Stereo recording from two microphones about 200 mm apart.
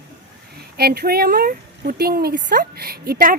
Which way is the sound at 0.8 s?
50° right (ahead or behind).